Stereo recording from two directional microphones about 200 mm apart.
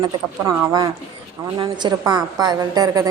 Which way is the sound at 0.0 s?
20° right (ahead or behind).